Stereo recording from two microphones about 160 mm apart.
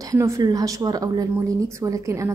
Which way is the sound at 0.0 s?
20° right (ahead or behind).